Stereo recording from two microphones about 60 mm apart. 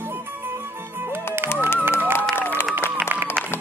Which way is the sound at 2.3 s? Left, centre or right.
Left.